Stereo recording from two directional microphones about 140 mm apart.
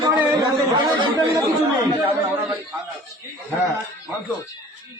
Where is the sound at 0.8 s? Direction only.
30° right (ahead or behind).